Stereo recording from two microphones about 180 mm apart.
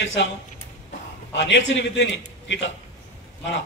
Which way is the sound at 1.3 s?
75° left (ahead or behind).